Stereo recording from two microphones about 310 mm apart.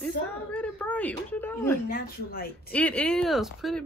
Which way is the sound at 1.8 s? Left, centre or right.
Left.